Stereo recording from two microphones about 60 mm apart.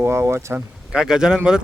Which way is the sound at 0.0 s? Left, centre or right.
Right.